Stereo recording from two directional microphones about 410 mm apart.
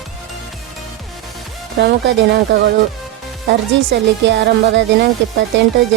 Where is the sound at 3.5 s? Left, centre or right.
Right.